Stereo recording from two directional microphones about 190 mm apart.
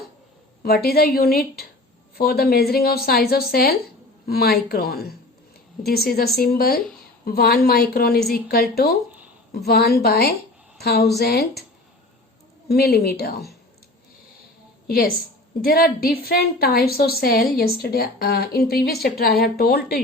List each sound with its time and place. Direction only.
0.6 s a woman's voice: 55° left (ahead or behind)
12.6 s speech: 55° left (ahead or behind)
14.8 s a woman's voice: 50° left (ahead or behind)